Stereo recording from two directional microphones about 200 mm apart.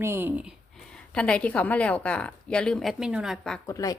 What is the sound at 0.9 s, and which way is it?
A woman's voice, 5° left (ahead or behind).